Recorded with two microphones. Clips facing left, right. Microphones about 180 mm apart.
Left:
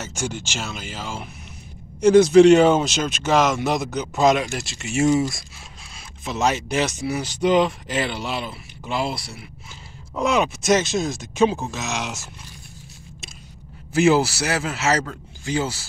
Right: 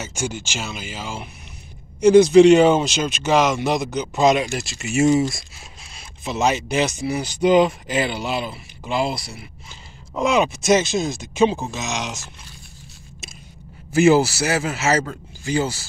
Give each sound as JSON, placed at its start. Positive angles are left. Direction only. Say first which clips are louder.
{"t": 0.0, "sound": "speech", "louder": "right 1 dB", "side_deg": 0}
{"t": 13.9, "sound": "speech", "louder": "right 2 dB", "side_deg": 0}